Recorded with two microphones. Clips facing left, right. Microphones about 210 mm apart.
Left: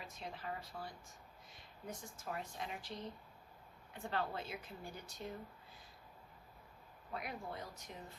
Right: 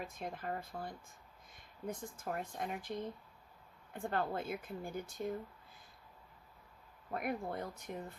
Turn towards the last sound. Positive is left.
turn(degrees=-55)  # may be behind; listen again after turning